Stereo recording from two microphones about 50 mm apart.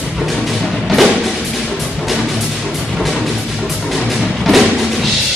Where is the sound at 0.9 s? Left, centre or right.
Centre.